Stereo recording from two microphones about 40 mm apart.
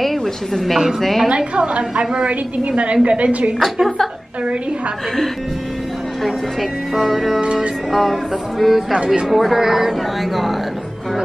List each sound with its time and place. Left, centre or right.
0.0 s speech: centre
1.3 s a woman's voice: right
6.9 s speech: centre
8.9 s a woman's voice: right
9.3 s speech: centre